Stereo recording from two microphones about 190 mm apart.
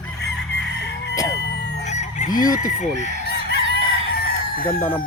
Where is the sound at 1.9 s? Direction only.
40° left (ahead or behind).